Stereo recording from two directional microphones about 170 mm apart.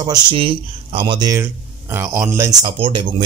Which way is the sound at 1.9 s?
15° right (ahead or behind).